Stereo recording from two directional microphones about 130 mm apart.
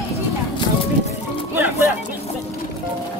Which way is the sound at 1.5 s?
15° right (ahead or behind).